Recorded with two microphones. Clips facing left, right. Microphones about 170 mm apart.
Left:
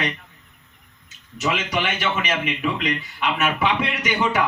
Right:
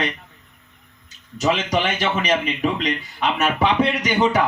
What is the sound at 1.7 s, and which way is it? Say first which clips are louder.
A man's voice: right 3 dB; 35° right (ahead or behind).